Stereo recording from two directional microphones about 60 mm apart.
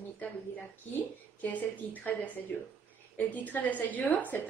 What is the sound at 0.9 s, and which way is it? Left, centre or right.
A woman's voice, left.